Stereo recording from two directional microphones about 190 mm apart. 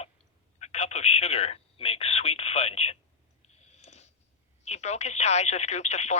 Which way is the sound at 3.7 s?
35° left (ahead or behind).